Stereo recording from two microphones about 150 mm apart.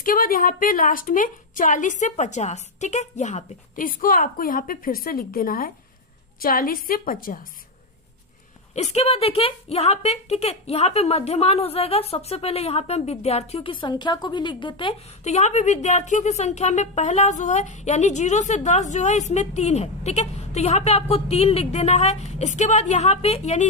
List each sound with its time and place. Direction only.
0.0 s a woman's voice: 70° left (ahead or behind)
8.7 s a woman's voice: 45° left (ahead or behind)
15.2 s a woman's voice: 50° left (ahead or behind)